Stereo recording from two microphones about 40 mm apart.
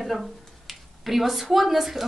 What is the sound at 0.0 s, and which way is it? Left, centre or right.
A woman's voice, centre.